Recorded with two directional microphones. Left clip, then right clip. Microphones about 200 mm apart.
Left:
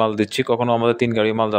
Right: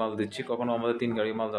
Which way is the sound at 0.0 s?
45° left (ahead or behind).